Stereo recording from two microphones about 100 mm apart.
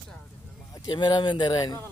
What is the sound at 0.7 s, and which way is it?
Speech, 45° left (ahead or behind).